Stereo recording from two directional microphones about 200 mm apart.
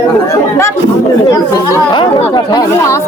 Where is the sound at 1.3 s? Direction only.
20° left (ahead or behind).